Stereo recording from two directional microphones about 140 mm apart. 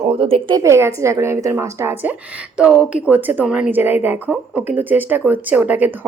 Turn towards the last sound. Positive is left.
turn(degrees=-10)  # may be behind; listen again after turning